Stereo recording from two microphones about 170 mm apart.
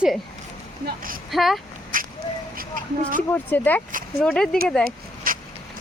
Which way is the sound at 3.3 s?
10° left (ahead or behind).